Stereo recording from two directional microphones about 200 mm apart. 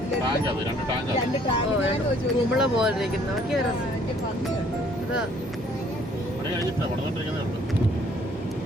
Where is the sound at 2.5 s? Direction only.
5° right (ahead or behind).